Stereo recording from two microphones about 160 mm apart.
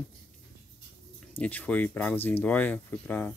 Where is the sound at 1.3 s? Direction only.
10° left (ahead or behind).